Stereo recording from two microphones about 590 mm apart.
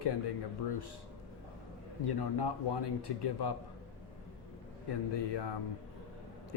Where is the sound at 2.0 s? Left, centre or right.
Left.